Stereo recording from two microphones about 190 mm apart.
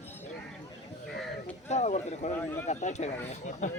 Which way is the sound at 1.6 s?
35° left (ahead or behind).